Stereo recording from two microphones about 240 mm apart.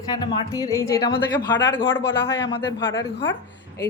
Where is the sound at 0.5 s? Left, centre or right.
Centre.